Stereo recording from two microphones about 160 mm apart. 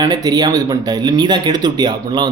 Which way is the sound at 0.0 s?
25° right (ahead or behind).